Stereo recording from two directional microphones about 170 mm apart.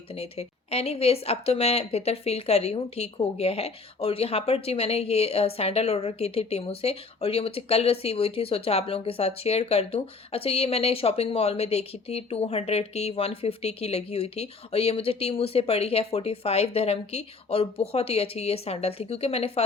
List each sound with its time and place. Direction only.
0.1 s speech: 35° left (ahead or behind)